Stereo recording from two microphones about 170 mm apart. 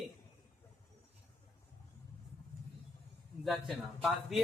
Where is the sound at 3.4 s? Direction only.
Centre (ahead or behind).